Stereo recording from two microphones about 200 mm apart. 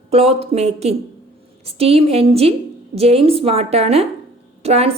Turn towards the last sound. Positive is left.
turn(degrees=-30)  # may be behind; listen again after turning